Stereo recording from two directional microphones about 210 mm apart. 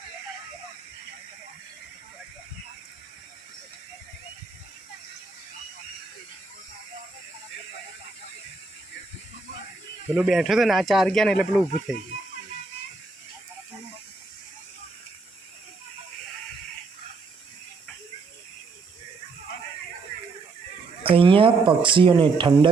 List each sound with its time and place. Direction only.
10.2 s speech: centre (ahead or behind)
21.0 s speech: 25° right (ahead or behind)